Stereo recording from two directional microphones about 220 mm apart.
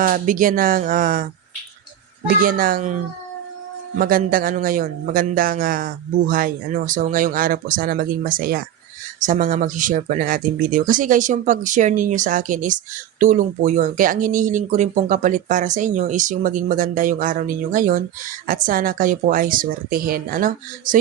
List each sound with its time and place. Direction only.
0.0 s speech: 35° right (ahead or behind)
2.4 s speech: 40° right (ahead or behind)